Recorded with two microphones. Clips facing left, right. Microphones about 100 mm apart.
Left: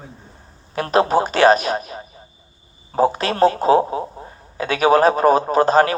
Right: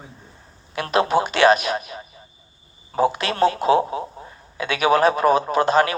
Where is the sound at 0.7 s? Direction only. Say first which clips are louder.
Left 3 dB; 35° left (ahead or behind).